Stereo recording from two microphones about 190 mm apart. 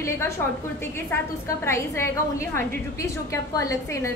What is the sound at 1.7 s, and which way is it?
A woman's voice, 15° left (ahead or behind).